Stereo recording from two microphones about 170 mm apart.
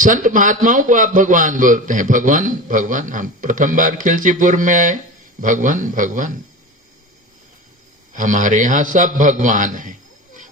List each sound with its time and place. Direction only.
0.0 s a man's voice: 50° right (ahead or behind)
8.1 s a man's voice: 50° right (ahead or behind)